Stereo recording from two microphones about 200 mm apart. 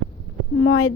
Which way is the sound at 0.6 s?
80° left.